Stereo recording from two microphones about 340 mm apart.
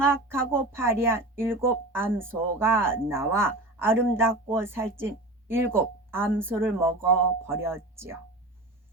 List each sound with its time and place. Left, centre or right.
0.0 s speech: centre